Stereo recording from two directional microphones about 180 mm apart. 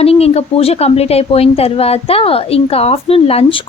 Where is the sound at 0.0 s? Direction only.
35° left (ahead or behind).